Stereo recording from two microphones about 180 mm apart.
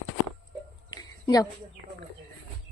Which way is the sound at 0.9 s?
20° left (ahead or behind).